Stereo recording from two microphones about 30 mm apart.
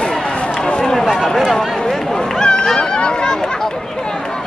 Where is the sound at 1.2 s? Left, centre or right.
Centre.